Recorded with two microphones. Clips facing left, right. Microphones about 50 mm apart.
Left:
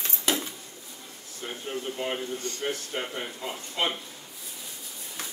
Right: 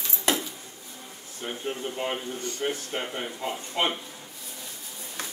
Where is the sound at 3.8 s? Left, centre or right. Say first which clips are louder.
Right 2 dB; right.